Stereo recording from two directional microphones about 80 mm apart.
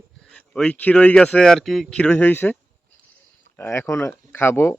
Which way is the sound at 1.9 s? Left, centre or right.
Centre.